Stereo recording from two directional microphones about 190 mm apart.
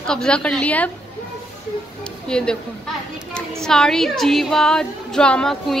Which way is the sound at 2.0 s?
5° left (ahead or behind).